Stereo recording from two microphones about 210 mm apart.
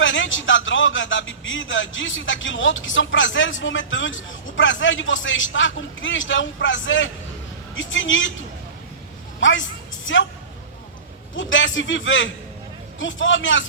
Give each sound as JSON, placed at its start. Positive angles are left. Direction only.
{"t": 0.0, "sound": "speech", "side_deg": 65}
{"t": 9.4, "sound": "speech", "side_deg": 65}
{"t": 11.3, "sound": "speech", "side_deg": 65}